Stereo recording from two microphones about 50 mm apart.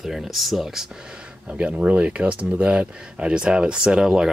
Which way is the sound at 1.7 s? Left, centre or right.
Right.